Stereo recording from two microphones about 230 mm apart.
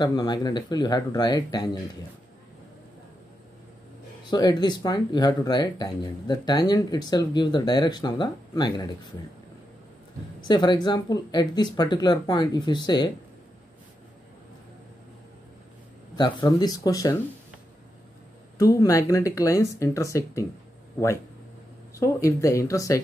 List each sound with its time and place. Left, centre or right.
0.0 s speech: centre
4.3 s speech: centre
10.5 s speech: centre
16.2 s speech: centre
18.6 s speech: centre
21.9 s speech: centre